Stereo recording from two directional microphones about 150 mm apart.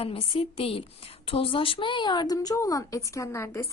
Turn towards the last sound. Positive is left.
turn(degrees=20)  # may be behind; listen again after turning